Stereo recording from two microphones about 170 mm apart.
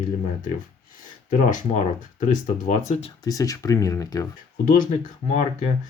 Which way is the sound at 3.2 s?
20° left (ahead or behind).